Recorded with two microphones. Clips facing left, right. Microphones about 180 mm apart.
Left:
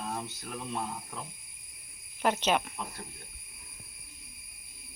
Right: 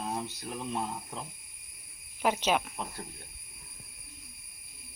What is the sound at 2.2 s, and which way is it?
Speech, 5° right (ahead or behind).